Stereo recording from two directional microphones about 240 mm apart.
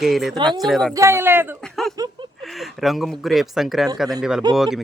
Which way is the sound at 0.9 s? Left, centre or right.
Centre.